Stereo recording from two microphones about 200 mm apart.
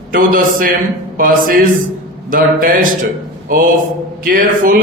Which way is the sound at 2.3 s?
45° right (ahead or behind).